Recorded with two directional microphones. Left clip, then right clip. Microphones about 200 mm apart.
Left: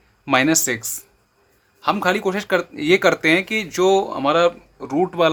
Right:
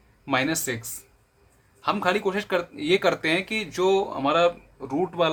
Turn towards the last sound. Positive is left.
turn(degrees=25)  # may be behind; listen again after turning